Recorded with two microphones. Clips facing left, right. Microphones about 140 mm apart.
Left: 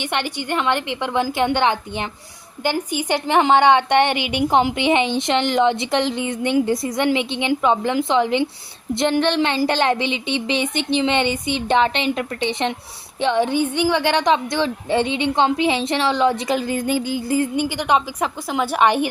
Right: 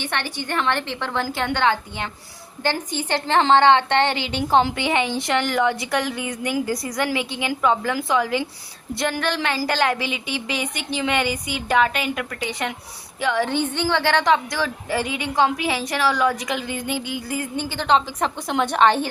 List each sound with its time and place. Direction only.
0.0 s a woman's voice: 15° left (ahead or behind)
17.6 s a woman's voice: 15° left (ahead or behind)